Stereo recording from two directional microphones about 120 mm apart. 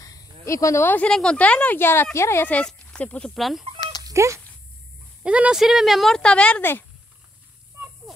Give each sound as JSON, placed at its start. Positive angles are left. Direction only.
{"t": 0.0, "sound": "speech", "side_deg": 30}
{"t": 2.5, "sound": "speech", "side_deg": 10}
{"t": 3.3, "sound": "speech", "side_deg": 0}
{"t": 4.0, "sound": "dog", "side_deg": -25}
{"t": 5.2, "sound": "speech", "side_deg": -10}